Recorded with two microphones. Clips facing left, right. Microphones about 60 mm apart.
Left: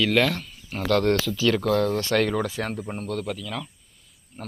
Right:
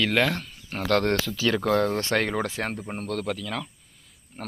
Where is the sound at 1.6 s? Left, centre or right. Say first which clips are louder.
Left 1 dB; right.